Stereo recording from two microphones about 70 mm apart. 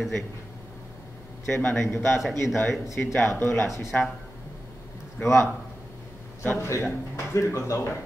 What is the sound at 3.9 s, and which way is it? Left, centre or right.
Speech, left.